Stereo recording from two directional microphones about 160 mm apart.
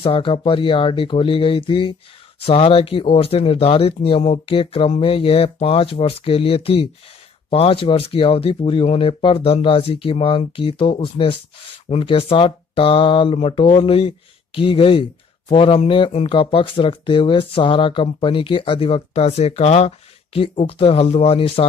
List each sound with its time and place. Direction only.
0.0 s speech: 35° left (ahead or behind)